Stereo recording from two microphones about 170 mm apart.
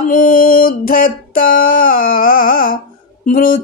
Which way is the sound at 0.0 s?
55° left (ahead or behind).